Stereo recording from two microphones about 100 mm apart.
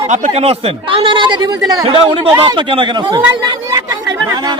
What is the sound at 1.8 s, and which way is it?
Speech, 65° right (ahead or behind).